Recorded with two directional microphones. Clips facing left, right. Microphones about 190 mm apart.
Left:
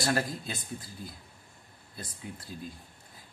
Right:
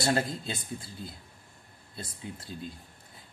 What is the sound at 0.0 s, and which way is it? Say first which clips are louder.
Speech: right 2 dB; 25° right (ahead or behind).